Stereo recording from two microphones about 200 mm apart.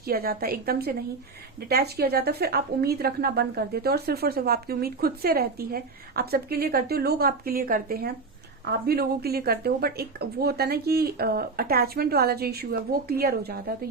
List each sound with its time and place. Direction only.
0.0 s a woman's voice: 50° right (ahead or behind)